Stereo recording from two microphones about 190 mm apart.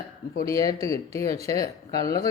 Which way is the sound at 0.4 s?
15° left (ahead or behind).